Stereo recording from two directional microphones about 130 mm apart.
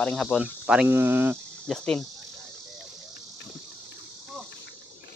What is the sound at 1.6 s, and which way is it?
Cricket, 5° left (ahead or behind).